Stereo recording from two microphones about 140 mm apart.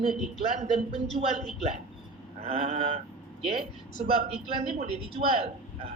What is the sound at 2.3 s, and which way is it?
Speech, 45° right (ahead or behind).